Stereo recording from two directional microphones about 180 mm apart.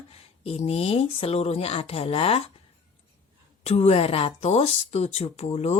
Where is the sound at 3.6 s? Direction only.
35° left (ahead or behind).